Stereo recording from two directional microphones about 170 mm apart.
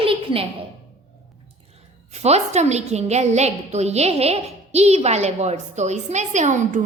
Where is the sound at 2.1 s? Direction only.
40° right (ahead or behind).